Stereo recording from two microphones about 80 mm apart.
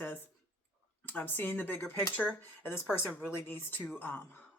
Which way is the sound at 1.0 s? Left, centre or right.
Left.